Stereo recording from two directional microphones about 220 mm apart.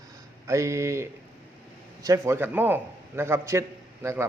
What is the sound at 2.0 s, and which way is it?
A man's voice, 10° right (ahead or behind).